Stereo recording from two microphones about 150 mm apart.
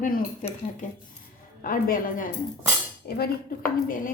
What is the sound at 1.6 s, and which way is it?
Speech, 65° left (ahead or behind).